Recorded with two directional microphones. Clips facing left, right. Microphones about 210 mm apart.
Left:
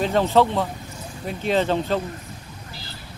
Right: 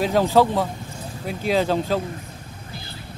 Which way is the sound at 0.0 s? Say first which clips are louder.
Right 1 dB; 5° right (ahead or behind).